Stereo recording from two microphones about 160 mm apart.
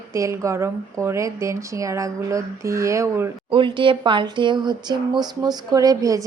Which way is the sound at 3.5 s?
30° right (ahead or behind).